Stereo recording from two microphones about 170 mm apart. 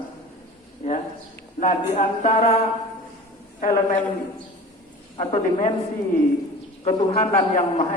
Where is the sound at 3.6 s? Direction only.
55° left (ahead or behind).